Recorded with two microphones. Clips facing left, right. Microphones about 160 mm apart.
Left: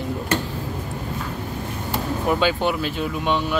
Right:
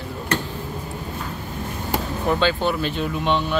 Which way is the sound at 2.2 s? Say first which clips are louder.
Even; 10° left (ahead or behind).